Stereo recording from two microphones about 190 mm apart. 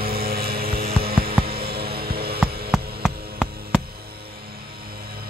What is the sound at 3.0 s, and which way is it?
Hum, 5° left (ahead or behind).